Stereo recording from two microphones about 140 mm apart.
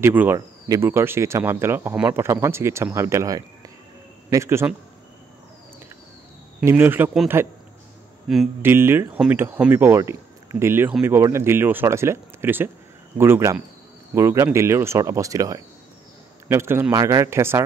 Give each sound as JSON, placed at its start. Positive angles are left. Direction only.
{"t": 0.0, "sound": "speech", "side_deg": -15}
{"t": 6.6, "sound": "speech", "side_deg": -15}
{"t": 8.3, "sound": "speech", "side_deg": -5}
{"t": 8.6, "sound": "a man's voice", "side_deg": -15}